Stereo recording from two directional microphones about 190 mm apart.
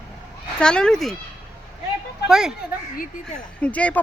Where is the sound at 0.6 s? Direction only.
5° left (ahead or behind).